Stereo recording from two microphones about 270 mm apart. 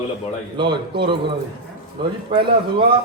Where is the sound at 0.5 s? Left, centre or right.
Centre.